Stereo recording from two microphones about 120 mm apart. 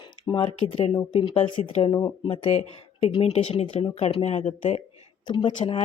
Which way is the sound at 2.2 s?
50° left (ahead or behind).